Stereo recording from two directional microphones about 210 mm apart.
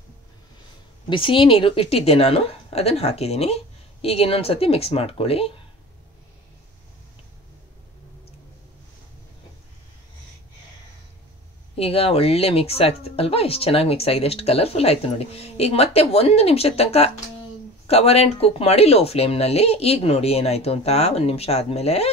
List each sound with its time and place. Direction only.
1.1 s speech: 25° left (ahead or behind)
11.7 s speech: 25° left (ahead or behind)